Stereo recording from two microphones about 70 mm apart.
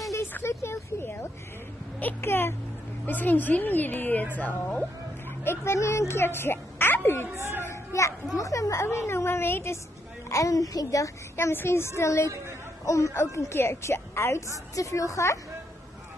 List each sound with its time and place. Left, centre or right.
0.3 s vehicle: left
2.2 s a woman's voice: left
5.4 s speech: left
7.6 s a sound: left
8.4 s a woman's voice: left
8.8 s a woman's voice: left
10.3 s a woman's voice: left
11.3 s a woman's voice: left